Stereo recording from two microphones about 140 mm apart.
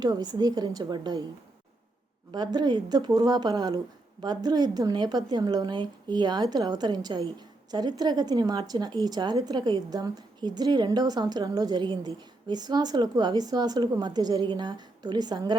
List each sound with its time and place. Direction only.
0.0 s a woman's voice: 30° right (ahead or behind)
2.3 s a woman's voice: 30° right (ahead or behind)